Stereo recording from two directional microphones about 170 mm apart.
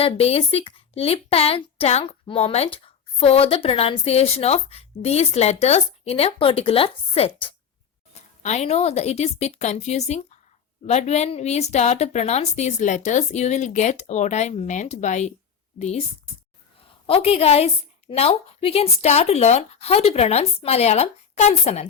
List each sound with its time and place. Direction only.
0.0 s a woman's voice: 35° left (ahead or behind)